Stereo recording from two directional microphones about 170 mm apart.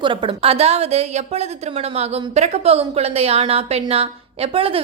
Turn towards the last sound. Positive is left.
turn(degrees=-35)  # may be behind; listen again after turning